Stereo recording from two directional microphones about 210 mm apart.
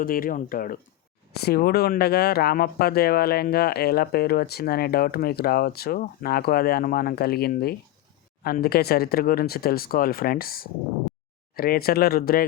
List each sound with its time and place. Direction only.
0.0 s speech: 40° left (ahead or behind)